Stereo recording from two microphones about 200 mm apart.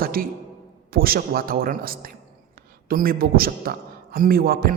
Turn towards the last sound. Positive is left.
turn(degrees=-50)  # may be behind; listen again after turning